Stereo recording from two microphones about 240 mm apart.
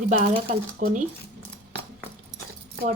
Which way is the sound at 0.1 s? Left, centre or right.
Right.